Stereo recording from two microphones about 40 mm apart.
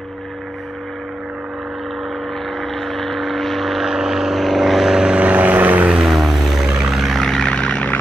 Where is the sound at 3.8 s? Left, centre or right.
Centre.